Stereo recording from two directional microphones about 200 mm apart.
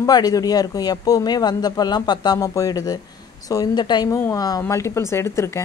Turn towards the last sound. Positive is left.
turn(degrees=15)  # may be behind; listen again after turning